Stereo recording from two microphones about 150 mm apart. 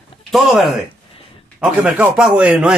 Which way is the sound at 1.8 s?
5° right (ahead or behind).